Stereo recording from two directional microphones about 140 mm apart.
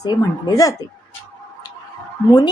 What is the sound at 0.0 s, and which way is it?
Speech, 25° left (ahead or behind).